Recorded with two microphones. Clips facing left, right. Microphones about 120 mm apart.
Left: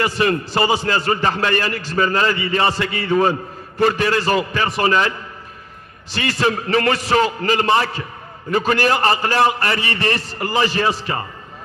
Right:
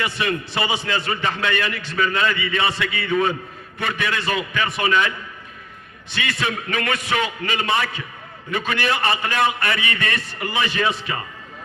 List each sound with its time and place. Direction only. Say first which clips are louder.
0.0 s a man's voice: left 6 dB; 40° left (ahead or behind)
6.1 s a man's voice: left 6 dB; 35° left (ahead or behind)